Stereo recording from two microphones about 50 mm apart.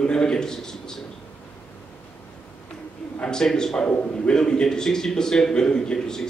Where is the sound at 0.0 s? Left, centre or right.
Centre.